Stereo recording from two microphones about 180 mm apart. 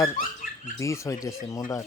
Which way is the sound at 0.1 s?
50° left (ahead or behind).